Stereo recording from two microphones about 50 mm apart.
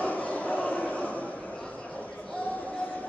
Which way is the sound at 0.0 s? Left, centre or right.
Left.